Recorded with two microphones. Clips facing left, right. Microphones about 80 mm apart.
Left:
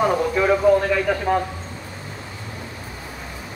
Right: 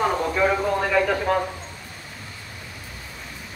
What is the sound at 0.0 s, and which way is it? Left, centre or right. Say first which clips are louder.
A man's voice: left 2 dB; centre.